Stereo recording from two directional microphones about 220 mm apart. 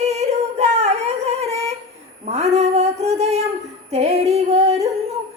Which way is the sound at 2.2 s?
30° right (ahead or behind).